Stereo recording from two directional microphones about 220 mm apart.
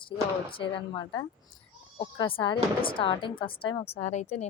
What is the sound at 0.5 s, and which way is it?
A woman's voice, 20° left (ahead or behind).